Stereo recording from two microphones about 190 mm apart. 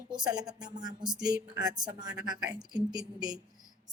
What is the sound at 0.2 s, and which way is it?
Speech, 20° right (ahead or behind).